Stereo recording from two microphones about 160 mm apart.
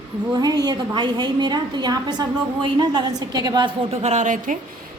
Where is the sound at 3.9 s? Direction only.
45° right (ahead or behind).